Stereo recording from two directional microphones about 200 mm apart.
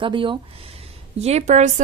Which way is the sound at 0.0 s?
25° right (ahead or behind).